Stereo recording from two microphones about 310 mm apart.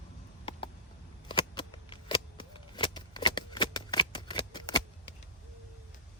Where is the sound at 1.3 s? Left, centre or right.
Centre.